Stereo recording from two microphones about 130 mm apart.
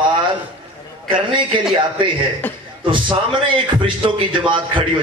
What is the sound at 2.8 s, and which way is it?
A man's voice, 40° right (ahead or behind).